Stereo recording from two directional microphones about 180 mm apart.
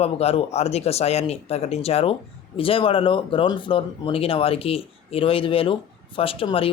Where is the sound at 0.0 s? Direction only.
35° left (ahead or behind).